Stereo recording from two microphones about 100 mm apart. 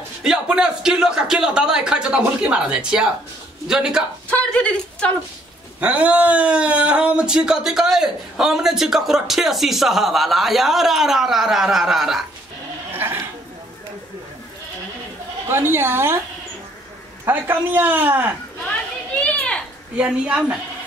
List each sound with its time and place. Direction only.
0.2 s a man's voice: 5° right (ahead or behind)
4.3 s speech: 10° left (ahead or behind)
5.8 s speech: 15° right (ahead or behind)
12.9 s sheep: 20° right (ahead or behind)
15.4 s a man's voice: 25° right (ahead or behind)
17.2 s a man's voice: 20° right (ahead or behind)
19.2 s a sound: 10° left (ahead or behind)
20.0 s a man's voice: 10° right (ahead or behind)